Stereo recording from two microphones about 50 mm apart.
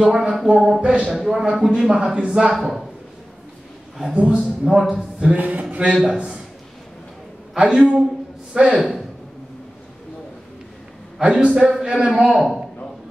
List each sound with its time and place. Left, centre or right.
0.0 s a man's voice: centre
2.5 s speech: centre
4.1 s a man's voice: right
5.2 s a man's voice: right
7.5 s a man's voice: centre
11.1 s a man's voice: centre